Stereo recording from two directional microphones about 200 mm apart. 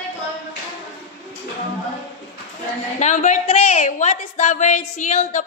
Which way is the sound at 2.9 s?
35° left (ahead or behind).